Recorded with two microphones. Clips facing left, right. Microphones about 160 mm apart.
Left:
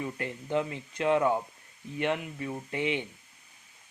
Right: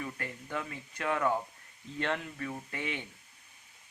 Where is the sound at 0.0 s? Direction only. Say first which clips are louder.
Left 5 dB; 20° left (ahead or behind).